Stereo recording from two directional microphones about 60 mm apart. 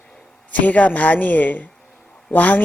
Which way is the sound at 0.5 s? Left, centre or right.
Left.